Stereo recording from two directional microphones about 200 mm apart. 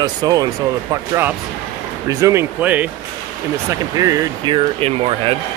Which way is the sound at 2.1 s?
15° right (ahead or behind).